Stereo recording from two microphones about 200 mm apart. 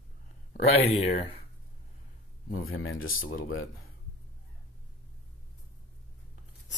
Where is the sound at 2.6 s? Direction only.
90° left.